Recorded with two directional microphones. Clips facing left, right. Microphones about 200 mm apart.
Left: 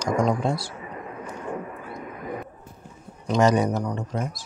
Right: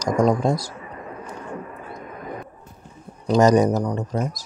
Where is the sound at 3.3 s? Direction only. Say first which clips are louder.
Right 4 dB; 40° right (ahead or behind).